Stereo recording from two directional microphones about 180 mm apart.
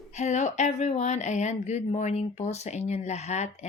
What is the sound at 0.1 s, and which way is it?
Speech, 40° left (ahead or behind).